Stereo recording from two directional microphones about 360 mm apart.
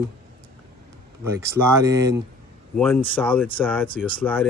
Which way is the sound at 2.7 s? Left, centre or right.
Centre.